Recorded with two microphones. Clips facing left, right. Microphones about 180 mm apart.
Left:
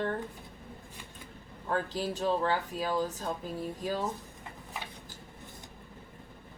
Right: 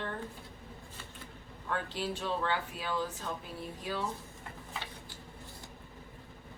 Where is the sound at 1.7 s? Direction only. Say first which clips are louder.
Left 4 dB; 40° left (ahead or behind).